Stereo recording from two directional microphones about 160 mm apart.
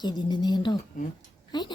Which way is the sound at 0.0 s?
25° left (ahead or behind).